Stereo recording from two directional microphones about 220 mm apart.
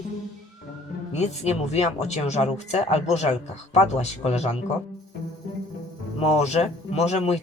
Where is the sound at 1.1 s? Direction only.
30° left (ahead or behind).